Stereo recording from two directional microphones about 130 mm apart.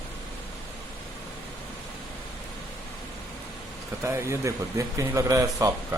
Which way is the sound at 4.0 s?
20° right (ahead or behind).